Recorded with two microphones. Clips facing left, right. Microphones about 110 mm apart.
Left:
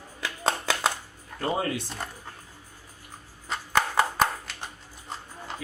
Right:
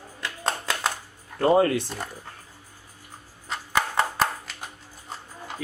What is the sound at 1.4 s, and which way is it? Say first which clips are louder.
Speech: right 9 dB; 60° right (ahead or behind).